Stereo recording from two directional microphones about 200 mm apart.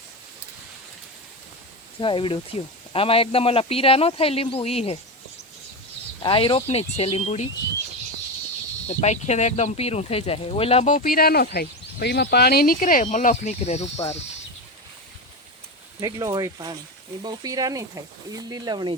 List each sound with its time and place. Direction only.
2.0 s speech: 25° left (ahead or behind)
6.2 s speech: 25° left (ahead or behind)
8.9 s speech: 35° left (ahead or behind)
16.0 s speech: 15° right (ahead or behind)